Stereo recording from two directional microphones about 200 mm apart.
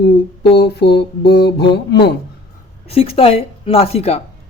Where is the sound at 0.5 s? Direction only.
55° left (ahead or behind).